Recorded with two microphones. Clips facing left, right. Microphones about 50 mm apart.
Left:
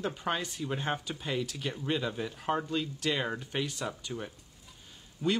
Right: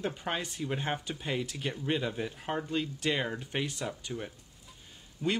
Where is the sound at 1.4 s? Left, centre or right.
Right.